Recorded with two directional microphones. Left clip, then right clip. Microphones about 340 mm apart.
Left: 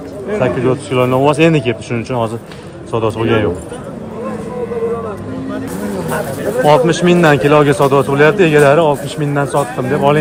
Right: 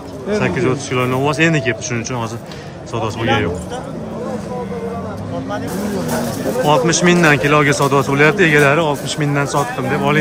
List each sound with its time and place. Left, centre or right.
0.3 s a man's voice: centre
6.7 s a man's voice: centre